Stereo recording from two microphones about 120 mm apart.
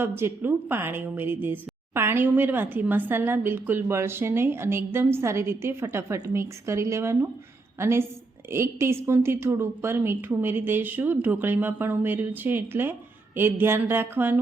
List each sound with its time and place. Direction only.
0.0 s a woman's voice: 20° right (ahead or behind)